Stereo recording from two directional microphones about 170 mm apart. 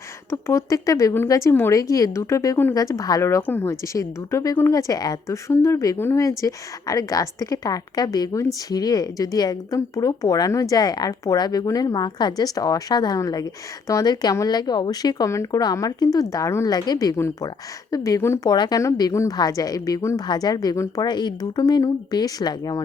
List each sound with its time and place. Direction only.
0.3 s a woman's voice: 15° left (ahead or behind)